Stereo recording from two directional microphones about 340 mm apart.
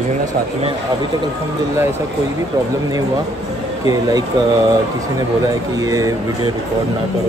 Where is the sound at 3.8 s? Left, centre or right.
Centre.